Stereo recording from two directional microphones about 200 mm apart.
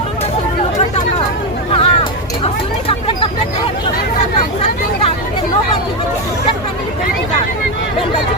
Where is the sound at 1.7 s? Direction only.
30° left (ahead or behind).